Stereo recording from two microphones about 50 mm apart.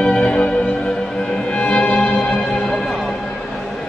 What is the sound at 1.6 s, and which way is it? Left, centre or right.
Music, left.